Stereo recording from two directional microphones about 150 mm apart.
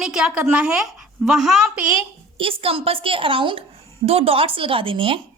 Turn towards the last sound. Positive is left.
turn(degrees=-35)  # may be behind; listen again after turning